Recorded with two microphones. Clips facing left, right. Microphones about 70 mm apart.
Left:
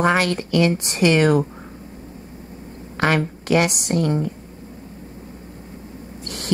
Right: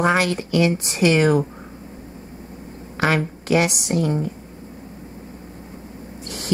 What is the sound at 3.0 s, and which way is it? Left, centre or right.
A woman's voice, centre.